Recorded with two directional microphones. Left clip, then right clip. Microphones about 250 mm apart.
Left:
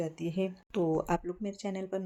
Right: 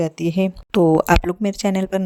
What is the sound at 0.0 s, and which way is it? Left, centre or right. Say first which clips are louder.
Speech: right 13 dB; right.